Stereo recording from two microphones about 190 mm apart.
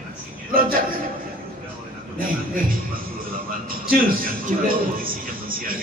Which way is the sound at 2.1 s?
50° right (ahead or behind).